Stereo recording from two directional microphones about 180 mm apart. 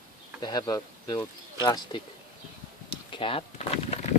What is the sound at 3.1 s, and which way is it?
Speech, 30° left (ahead or behind).